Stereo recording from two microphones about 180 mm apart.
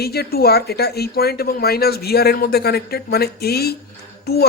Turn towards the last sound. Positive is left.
turn(degrees=60)  # may be behind; listen again after turning